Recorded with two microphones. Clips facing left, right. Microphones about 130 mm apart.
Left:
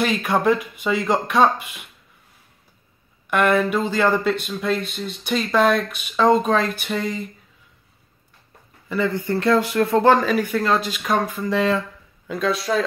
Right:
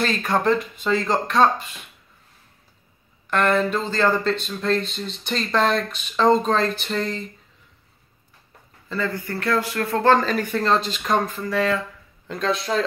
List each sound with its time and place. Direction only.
0.0 s speech: 10° left (ahead or behind)
3.3 s speech: 10° left (ahead or behind)
8.8 s speech: 15° left (ahead or behind)
11.4 s speech: 20° left (ahead or behind)
12.3 s speech: 5° left (ahead or behind)